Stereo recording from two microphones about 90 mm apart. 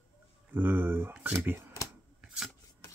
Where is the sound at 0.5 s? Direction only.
25° right (ahead or behind).